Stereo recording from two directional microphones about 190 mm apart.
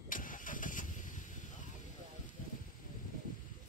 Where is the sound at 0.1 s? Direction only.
45° left (ahead or behind).